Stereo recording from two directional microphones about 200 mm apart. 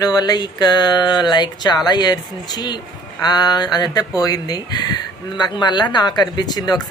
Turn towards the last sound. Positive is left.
turn(degrees=20)  # may be behind; listen again after turning